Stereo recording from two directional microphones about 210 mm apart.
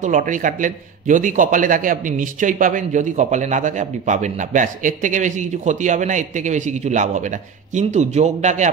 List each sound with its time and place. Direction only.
0.0 s a man's voice: 35° right (ahead or behind)